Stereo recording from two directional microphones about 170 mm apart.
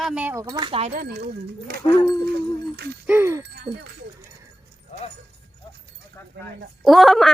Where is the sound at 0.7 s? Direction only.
35° right (ahead or behind).